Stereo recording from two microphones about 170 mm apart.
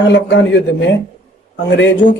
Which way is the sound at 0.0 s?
90° left.